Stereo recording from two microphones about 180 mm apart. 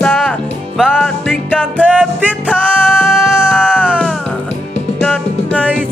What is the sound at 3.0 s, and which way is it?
Music, centre (ahead or behind).